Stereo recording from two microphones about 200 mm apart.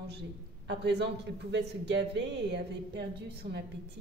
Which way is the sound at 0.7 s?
60° right (ahead or behind).